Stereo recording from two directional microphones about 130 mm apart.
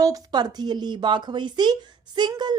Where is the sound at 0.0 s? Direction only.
30° right (ahead or behind).